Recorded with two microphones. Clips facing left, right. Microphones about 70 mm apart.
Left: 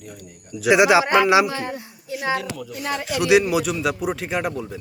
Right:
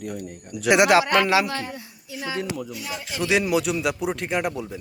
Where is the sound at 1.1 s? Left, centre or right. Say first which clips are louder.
Left 4 dB; centre.